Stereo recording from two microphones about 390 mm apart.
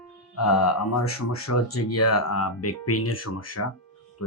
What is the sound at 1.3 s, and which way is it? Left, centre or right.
Speech, left.